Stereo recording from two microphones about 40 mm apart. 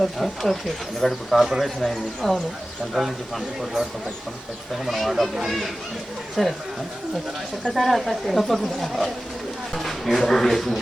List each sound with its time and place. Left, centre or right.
0.0 s speech: centre
4.9 s speech: centre
7.7 s speech: centre